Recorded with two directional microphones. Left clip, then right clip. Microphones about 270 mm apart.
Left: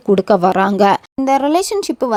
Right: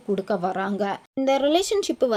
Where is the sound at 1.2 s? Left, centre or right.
Left.